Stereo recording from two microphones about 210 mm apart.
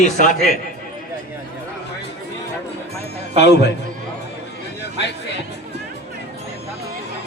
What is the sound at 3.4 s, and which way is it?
Speech, 50° left (ahead or behind).